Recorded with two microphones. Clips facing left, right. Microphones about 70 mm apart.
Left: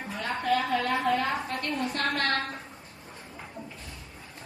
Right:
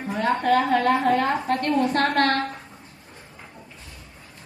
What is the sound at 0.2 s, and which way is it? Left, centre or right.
A woman's voice, right.